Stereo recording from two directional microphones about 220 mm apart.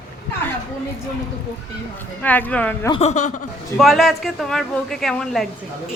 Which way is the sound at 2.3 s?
5° left (ahead or behind).